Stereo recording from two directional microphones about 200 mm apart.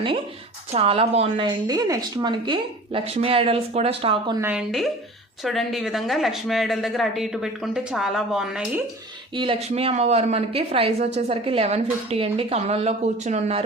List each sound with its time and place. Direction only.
0.7 s a woman's voice: 30° right (ahead or behind)
4.4 s speech: 10° right (ahead or behind)
9.3 s speech: 25° right (ahead or behind)